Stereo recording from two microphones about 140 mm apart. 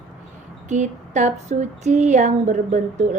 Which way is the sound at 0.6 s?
60° right (ahead or behind).